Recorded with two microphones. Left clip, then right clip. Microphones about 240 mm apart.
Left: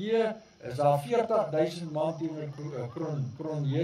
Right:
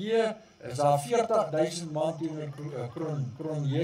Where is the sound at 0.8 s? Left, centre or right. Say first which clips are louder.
Right 1 dB; right.